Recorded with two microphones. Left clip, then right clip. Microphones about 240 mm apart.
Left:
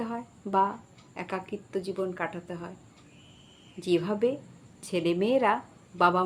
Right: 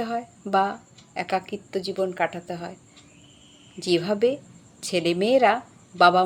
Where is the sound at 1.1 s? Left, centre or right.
Centre.